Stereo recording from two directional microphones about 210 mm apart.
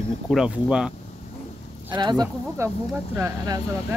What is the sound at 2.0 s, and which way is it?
Speech, 20° right (ahead or behind).